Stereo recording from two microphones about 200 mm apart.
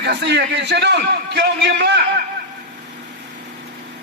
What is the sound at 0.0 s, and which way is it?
A man's voice, 60° right (ahead or behind).